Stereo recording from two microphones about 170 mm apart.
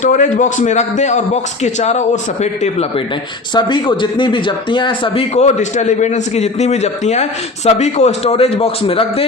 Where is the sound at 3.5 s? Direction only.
25° left (ahead or behind).